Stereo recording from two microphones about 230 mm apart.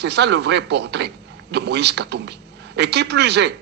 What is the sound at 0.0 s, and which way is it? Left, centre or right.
Speech, right.